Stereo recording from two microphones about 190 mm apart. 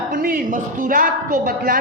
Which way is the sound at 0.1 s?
50° right (ahead or behind).